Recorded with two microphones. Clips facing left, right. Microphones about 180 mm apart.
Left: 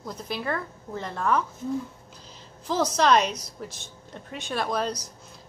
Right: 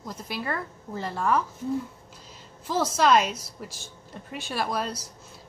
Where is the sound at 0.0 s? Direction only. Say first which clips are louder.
Left 2 dB; centre (ahead or behind).